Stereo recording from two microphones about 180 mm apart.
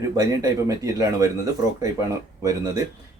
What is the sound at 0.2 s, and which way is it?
Speech, 20° right (ahead or behind).